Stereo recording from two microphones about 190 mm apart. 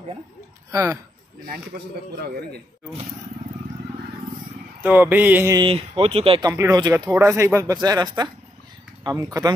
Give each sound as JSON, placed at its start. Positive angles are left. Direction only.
{"t": 0.7, "sound": "speech", "side_deg": -15}
{"t": 4.8, "sound": "a sound", "side_deg": -10}
{"t": 5.6, "sound": "speech", "side_deg": -30}